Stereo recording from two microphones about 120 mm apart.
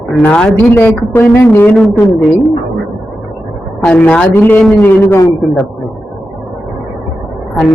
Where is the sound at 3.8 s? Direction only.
10° left (ahead or behind).